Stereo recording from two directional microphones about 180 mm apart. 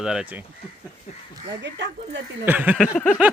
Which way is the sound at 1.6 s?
80° right.